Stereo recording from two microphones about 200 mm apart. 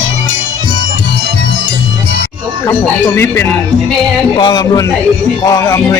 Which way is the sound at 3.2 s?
10° left (ahead or behind).